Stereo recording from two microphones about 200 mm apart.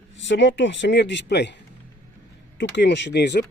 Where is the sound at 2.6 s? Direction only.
60° left (ahead or behind).